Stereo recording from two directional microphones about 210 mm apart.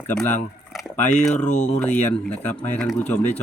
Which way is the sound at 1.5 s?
35° left (ahead or behind).